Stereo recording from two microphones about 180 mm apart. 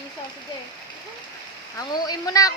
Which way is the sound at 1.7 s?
20° left (ahead or behind).